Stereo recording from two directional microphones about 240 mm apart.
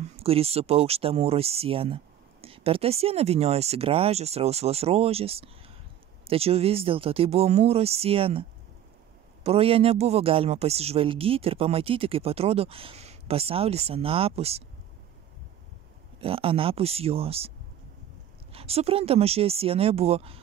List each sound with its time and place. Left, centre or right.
0.0 s speech: right
16.2 s speech: right
18.5 s speech: right